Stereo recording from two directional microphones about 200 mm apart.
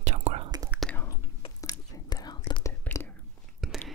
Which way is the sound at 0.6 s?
5° left (ahead or behind).